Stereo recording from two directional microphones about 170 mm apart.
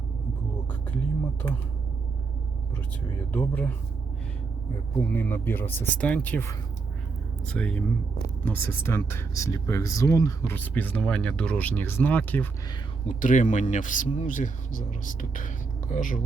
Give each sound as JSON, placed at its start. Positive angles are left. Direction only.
{"t": 1.4, "sound": "speech", "side_deg": 10}
{"t": 3.3, "sound": "speech", "side_deg": 10}
{"t": 4.9, "sound": "speech", "side_deg": 10}
{"t": 13.1, "sound": "speech", "side_deg": 50}